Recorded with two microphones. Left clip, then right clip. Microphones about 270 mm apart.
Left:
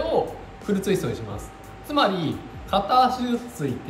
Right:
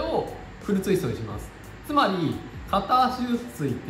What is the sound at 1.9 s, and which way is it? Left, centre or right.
Speech, centre.